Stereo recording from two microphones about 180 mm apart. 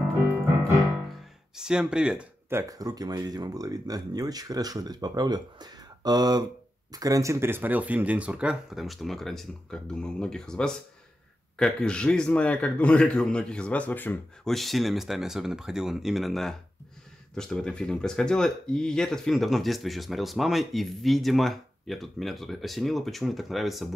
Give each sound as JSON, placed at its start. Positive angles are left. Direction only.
{"t": 1.5, "sound": "speech", "side_deg": -5}
{"t": 2.7, "sound": "speech", "side_deg": -20}